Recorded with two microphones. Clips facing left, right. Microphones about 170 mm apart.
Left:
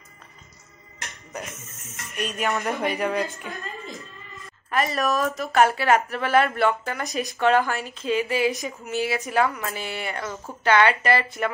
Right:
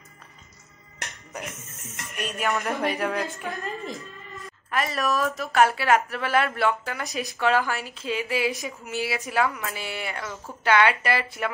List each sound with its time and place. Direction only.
2.3 s a woman's voice: centre (ahead or behind)
4.6 s a woman's voice: centre (ahead or behind)